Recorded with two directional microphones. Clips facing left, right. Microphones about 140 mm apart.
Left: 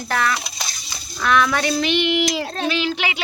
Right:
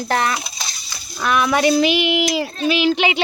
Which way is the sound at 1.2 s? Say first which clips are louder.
Right 2 dB; 10° right (ahead or behind).